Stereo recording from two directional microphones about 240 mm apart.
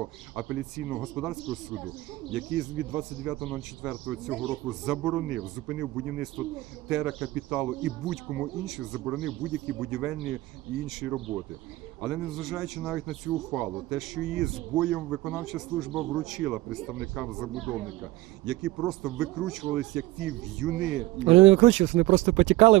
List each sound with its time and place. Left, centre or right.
0.4 s speech: centre
21.2 s speech: right